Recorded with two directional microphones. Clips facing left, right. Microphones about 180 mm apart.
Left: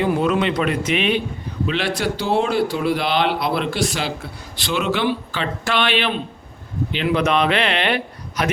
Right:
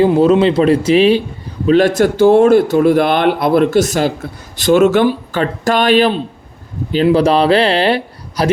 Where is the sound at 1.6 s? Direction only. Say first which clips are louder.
Right 12 dB; 45° right (ahead or behind).